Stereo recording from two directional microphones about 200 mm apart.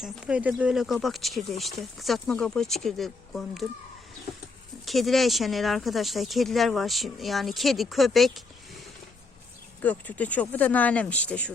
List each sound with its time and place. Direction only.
0.0 s speech: 5° right (ahead or behind)
4.9 s speech: centre (ahead or behind)
9.8 s speech: 5° left (ahead or behind)